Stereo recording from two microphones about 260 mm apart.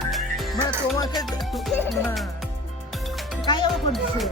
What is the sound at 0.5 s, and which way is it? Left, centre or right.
Music, centre.